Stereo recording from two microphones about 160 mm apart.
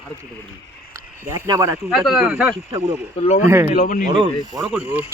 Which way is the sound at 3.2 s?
40° left (ahead or behind).